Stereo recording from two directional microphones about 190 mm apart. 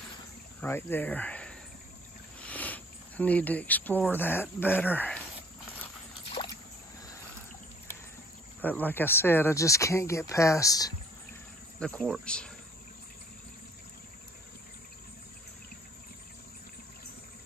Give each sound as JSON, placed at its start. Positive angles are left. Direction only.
{"t": 0.6, "sound": "speech", "side_deg": 10}
{"t": 6.4, "sound": "rowboat", "side_deg": 25}
{"t": 8.5, "sound": "speech", "side_deg": 10}
{"t": 11.8, "sound": "speech", "side_deg": 5}